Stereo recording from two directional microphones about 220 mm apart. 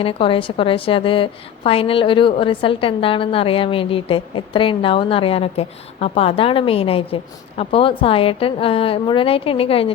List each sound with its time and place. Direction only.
0.0 s a woman's voice: 25° left (ahead or behind)